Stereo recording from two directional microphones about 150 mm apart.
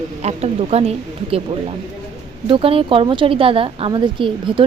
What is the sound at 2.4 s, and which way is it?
Speech, 35° right (ahead or behind).